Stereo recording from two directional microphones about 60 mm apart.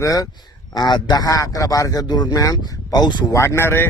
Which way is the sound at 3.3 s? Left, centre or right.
Left.